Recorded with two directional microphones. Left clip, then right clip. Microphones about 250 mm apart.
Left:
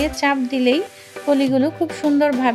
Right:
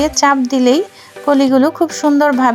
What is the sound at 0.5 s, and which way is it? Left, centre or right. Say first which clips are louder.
Speech: right 6 dB; right.